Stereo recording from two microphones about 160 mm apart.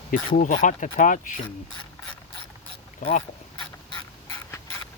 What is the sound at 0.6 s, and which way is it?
Speech, 55° left (ahead or behind).